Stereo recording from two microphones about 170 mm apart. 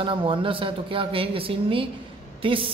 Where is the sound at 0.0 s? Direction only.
30° right (ahead or behind).